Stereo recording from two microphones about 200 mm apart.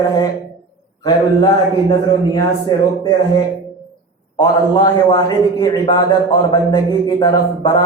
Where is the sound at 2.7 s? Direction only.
20° left (ahead or behind).